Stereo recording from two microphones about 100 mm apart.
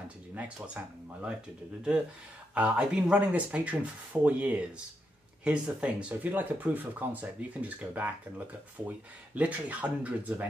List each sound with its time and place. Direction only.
0.7 s speech: 10° right (ahead or behind)
2.5 s speech: 10° right (ahead or behind)